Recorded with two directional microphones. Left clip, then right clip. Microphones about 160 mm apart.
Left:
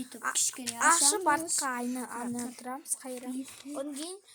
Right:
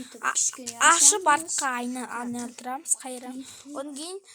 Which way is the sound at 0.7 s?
20° right (ahead or behind).